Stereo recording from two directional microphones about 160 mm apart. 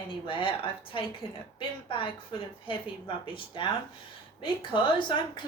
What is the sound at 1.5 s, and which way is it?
A woman's voice, 30° left (ahead or behind).